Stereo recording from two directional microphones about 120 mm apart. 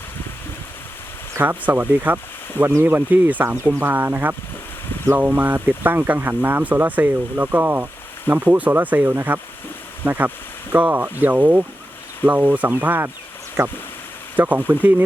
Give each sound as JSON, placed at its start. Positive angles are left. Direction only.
{"t": 1.4, "sound": "speech", "side_deg": -15}